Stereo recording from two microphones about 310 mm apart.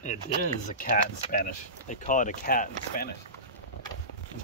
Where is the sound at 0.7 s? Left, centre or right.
Left.